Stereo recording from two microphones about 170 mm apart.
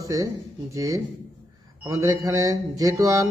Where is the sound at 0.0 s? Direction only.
20° right (ahead or behind).